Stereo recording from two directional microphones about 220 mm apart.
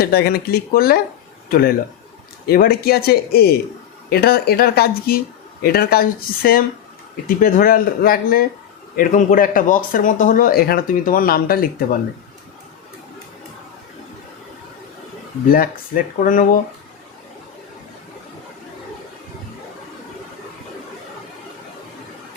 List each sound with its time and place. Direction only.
0.0 s a man's voice: 45° left (ahead or behind)
15.4 s speech: 40° left (ahead or behind)